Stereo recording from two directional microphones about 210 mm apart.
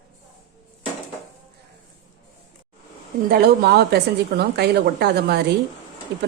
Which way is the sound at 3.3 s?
50° right (ahead or behind).